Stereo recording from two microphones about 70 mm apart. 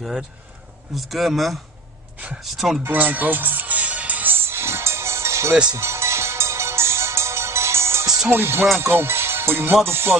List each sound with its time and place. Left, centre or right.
0.9 s speech: centre
2.8 s music: right
8.7 s speech: right
9.8 s music: right